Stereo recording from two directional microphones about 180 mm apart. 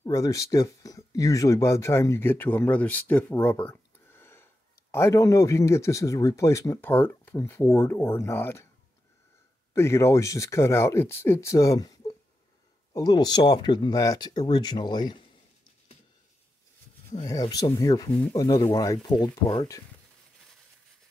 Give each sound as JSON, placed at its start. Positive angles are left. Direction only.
{"t": 0.0, "sound": "speech", "side_deg": 15}
{"t": 9.8, "sound": "speech", "side_deg": 15}
{"t": 17.3, "sound": "speech", "side_deg": 20}